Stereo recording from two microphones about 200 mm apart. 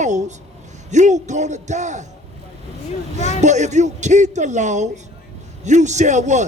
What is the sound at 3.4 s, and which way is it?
A man's voice, 35° right (ahead or behind).